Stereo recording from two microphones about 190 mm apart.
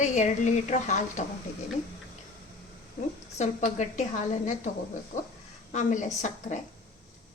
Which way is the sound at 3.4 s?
40° left (ahead or behind).